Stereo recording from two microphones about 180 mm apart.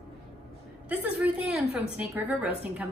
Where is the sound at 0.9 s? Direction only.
10° right (ahead or behind).